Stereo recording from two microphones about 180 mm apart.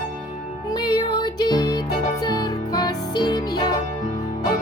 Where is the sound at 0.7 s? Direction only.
25° left (ahead or behind).